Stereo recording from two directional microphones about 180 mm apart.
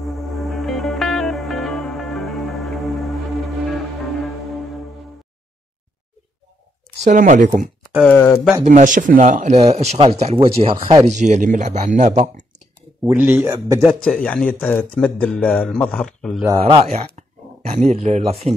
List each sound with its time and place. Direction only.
0.0 s music: centre (ahead or behind)
7.1 s speech: 45° right (ahead or behind)
8.0 s speech: 10° left (ahead or behind)
8.6 s speech: 45° right (ahead or behind)
11.1 s speech: 40° right (ahead or behind)
13.0 s a man's voice: 10° right (ahead or behind)
13.8 s speech: 5° left (ahead or behind)
16.4 s speech: 30° right (ahead or behind)